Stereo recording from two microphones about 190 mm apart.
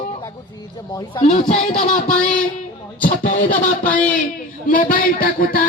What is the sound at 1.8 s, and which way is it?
Speech, 40° left (ahead or behind).